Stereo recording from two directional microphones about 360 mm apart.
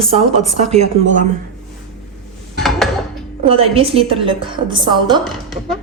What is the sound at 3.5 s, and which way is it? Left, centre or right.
A woman's voice, centre.